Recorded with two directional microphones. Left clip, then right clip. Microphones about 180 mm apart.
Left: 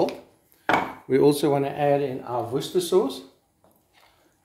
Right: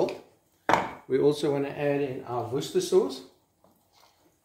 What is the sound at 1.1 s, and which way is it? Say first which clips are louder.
Speech: left 5 dB; 55° left (ahead or behind).